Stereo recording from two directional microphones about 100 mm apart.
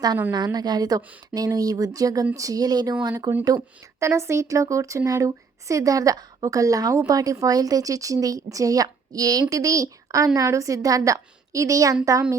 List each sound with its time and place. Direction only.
0.3 s speech: 45° right (ahead or behind)
4.0 s speech: 30° right (ahead or behind)